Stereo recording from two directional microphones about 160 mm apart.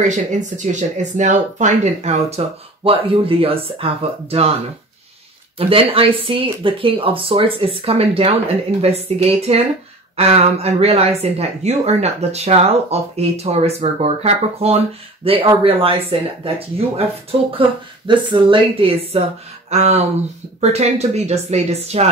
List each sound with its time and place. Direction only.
0.0 s speech: 50° right (ahead or behind)
5.6 s speech: 35° right (ahead or behind)